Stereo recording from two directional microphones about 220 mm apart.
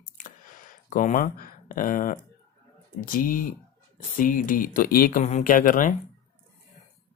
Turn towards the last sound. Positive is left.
turn(degrees=40)  # may be behind; listen again after turning